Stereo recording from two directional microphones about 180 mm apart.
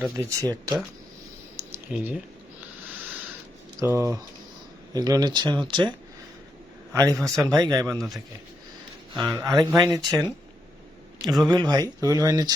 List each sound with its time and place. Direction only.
0.2 s speech: 20° right (ahead or behind)
1.5 s typing: 10° right (ahead or behind)
3.8 s speech: 15° right (ahead or behind)
6.9 s speech: 20° right (ahead or behind)
7.2 s speech: 5° left (ahead or behind)
7.4 s speech: 20° right (ahead or behind)
9.1 s speech: centre (ahead or behind)
9.6 s speech: 20° right (ahead or behind)
11.4 s speech: 25° right (ahead or behind)